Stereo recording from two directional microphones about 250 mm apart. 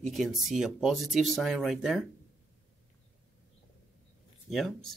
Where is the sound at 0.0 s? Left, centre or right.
Centre.